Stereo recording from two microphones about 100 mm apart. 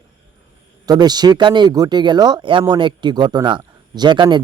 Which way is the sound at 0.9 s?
45° right (ahead or behind).